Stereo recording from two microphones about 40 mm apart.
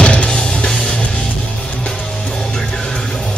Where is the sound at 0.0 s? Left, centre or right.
Left.